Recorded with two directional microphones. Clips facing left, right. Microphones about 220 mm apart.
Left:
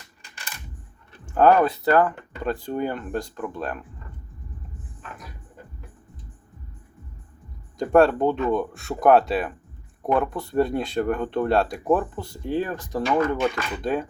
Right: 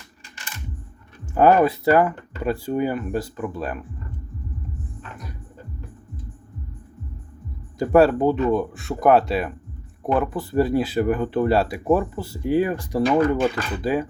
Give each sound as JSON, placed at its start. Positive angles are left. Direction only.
{"t": 1.4, "sound": "speech", "side_deg": -10}
{"t": 7.8, "sound": "speech", "side_deg": -5}